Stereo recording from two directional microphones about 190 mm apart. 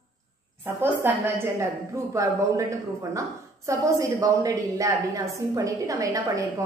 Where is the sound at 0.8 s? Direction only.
10° right (ahead or behind).